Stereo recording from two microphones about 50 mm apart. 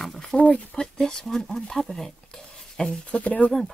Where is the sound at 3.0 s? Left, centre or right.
Left.